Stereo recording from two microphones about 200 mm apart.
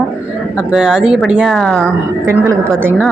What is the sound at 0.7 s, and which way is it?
A woman's voice, centre (ahead or behind).